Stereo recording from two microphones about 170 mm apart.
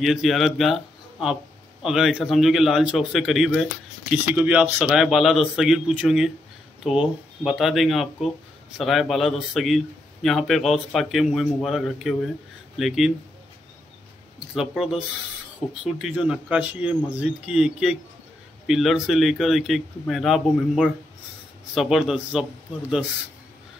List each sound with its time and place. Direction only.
0.0 s speech: centre (ahead or behind)
14.5 s speech: centre (ahead or behind)